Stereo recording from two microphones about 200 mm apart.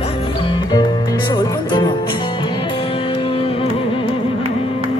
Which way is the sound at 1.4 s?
20° left (ahead or behind).